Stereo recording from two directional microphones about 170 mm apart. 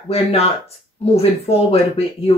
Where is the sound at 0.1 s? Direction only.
35° left (ahead or behind).